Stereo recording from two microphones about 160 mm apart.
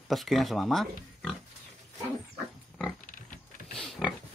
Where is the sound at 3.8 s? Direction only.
Centre (ahead or behind).